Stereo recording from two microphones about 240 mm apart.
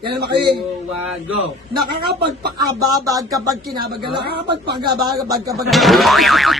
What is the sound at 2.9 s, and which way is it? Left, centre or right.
Speech, centre.